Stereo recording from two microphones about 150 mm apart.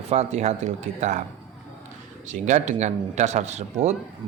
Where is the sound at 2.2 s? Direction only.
55° right (ahead or behind).